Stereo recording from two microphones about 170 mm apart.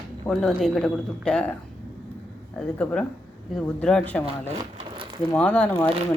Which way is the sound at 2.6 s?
10° left (ahead or behind).